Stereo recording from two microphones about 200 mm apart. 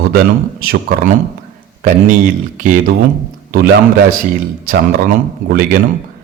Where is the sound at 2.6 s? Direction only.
40° right (ahead or behind).